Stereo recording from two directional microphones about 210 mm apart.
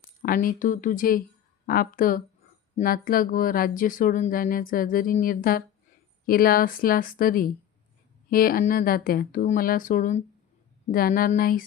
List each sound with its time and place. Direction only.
0.0 s speech: 45° left (ahead or behind)